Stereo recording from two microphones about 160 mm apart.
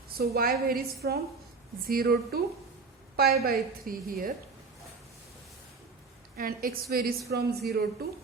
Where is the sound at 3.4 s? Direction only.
65° right (ahead or behind).